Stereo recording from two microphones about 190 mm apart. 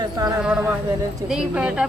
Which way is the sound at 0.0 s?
20° right (ahead or behind).